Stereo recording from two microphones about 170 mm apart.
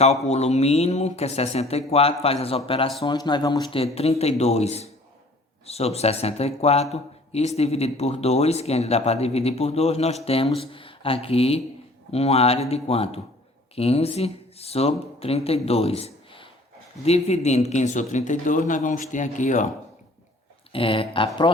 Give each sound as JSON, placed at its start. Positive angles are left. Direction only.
{"t": 0.0, "sound": "speech", "side_deg": 40}
{"t": 20.7, "sound": "speech", "side_deg": 30}